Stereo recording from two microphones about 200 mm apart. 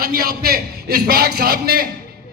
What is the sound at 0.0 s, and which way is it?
A man's voice, 50° right (ahead or behind).